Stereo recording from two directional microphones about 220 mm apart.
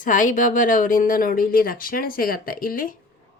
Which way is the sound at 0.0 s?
35° left (ahead or behind).